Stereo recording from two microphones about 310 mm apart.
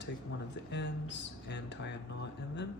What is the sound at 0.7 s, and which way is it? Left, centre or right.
Speech, left.